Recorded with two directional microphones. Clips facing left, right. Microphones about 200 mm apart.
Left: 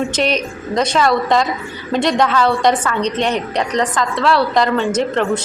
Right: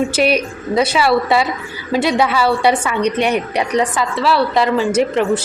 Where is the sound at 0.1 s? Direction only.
10° right (ahead or behind).